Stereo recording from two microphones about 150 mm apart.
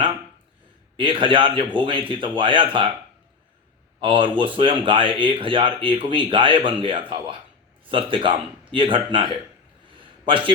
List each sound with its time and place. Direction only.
0.9 s speech: 35° right (ahead or behind)
4.0 s speech: 35° right (ahead or behind)